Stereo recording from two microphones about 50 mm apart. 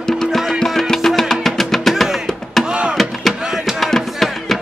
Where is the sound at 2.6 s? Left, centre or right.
Centre.